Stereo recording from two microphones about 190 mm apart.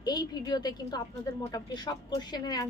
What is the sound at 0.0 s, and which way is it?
A woman's voice, 20° left (ahead or behind).